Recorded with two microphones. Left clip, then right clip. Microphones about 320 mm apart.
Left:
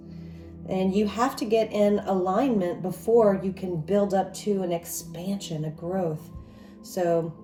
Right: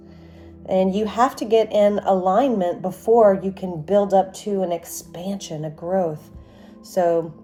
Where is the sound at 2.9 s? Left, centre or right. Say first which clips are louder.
Right 6 dB; right.